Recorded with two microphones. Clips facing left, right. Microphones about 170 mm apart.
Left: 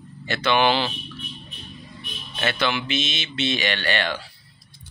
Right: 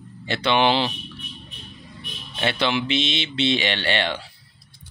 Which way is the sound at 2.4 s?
25° right (ahead or behind).